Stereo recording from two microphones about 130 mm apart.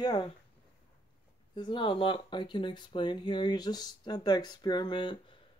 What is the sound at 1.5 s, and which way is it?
Speech, 40° left (ahead or behind).